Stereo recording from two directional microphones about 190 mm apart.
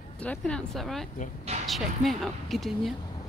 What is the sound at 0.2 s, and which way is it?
Speech, 5° left (ahead or behind).